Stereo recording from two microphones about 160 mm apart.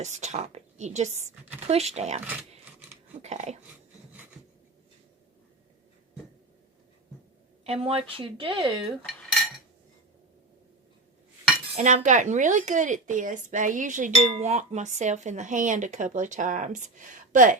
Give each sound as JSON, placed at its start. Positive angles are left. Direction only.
{"t": 0.0, "sound": "speech", "side_deg": -45}
{"t": 7.6, "sound": "speech", "side_deg": -40}
{"t": 11.8, "sound": "speech", "side_deg": -50}
{"t": 14.3, "sound": "speech", "side_deg": -40}